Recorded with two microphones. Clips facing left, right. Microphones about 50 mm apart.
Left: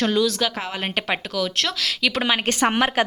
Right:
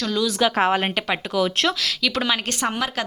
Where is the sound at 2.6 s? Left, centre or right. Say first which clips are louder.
Left 5 dB; left.